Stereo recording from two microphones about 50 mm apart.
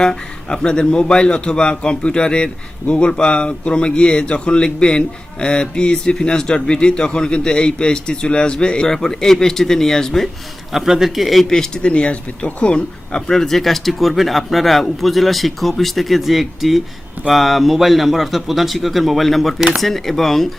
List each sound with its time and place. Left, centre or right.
0.0 s speech: centre
10.7 s a man's voice: centre
11.8 s speech: left; by 20.5 s centre